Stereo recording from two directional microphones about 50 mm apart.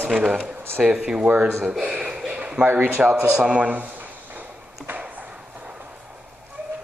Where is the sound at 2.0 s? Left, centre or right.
Centre.